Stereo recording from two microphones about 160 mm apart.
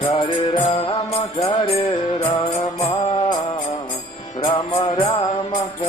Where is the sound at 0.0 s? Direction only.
30° left (ahead or behind).